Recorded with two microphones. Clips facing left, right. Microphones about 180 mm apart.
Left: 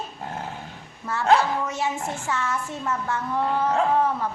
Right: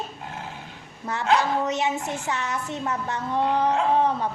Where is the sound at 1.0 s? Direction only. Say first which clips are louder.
Left 2 dB; 30° right (ahead or behind).